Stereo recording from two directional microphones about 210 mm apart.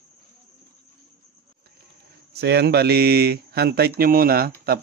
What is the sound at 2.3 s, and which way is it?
Speech, 50° right (ahead or behind).